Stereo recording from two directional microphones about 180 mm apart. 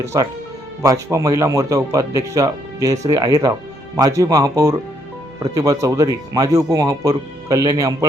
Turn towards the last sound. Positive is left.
turn(degrees=-20)  # may be behind; listen again after turning